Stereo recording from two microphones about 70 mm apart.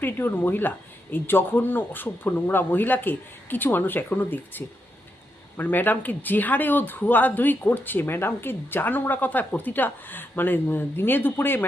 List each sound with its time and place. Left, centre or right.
0.0 s speech: left